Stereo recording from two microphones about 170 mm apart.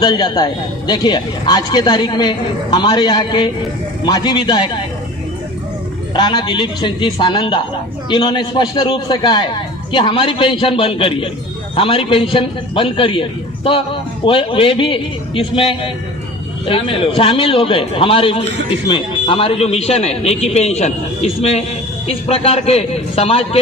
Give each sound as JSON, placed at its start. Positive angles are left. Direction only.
{"t": 0.0, "sound": "a man's voice", "side_deg": 25}
{"t": 6.1, "sound": "a man's voice", "side_deg": 25}